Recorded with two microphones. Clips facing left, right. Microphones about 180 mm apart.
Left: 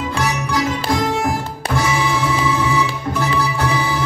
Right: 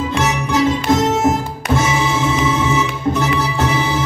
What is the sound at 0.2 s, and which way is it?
Music, 25° right (ahead or behind).